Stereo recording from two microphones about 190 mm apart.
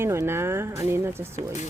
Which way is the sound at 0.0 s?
15° right (ahead or behind).